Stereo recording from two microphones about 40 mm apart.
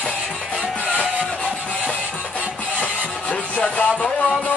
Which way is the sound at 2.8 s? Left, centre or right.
Left.